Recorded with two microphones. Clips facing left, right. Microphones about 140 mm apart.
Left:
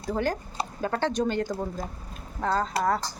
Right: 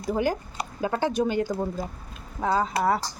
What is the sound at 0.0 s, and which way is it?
Speech, 10° right (ahead or behind).